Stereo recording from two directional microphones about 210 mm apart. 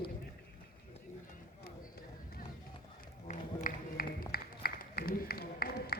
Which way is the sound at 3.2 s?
40° left (ahead or behind).